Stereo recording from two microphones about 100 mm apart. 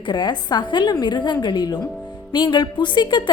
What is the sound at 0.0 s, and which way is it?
A woman's voice, 50° left (ahead or behind).